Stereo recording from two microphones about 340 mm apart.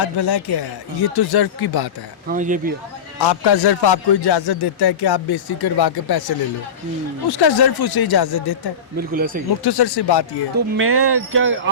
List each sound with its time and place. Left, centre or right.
0.0 s a man's voice: left
2.2 s speech: right
3.2 s a man's voice: left
9.0 s speech: right
9.6 s a man's voice: left
10.8 s speech: right